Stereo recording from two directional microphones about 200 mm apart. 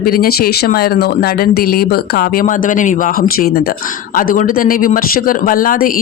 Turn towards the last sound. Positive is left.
turn(degrees=45)  # may be behind; listen again after turning